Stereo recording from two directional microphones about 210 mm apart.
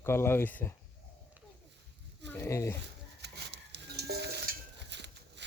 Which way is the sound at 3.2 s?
55° right (ahead or behind).